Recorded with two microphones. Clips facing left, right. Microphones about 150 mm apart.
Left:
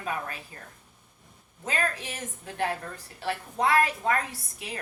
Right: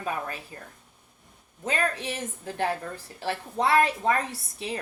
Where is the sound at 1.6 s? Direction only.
30° right (ahead or behind).